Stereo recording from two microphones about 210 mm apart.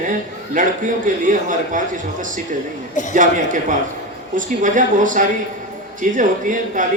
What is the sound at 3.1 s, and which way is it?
A man's voice, 35° right (ahead or behind).